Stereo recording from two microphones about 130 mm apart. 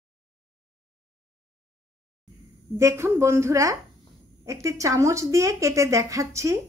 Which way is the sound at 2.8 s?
20° right (ahead or behind).